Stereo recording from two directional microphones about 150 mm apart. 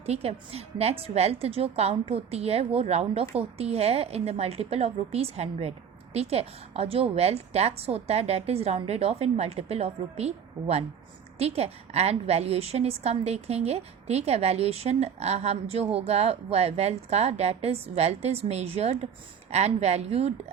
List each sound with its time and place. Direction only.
0.0 s a woman's voice: 45° right (ahead or behind)